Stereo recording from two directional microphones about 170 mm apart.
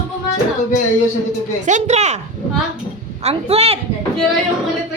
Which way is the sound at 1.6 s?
45° right (ahead or behind).